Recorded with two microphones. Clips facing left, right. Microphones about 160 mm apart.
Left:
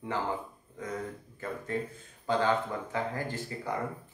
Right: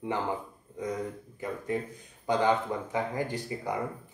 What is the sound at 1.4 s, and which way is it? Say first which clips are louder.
Speech: right 2 dB; 15° right (ahead or behind).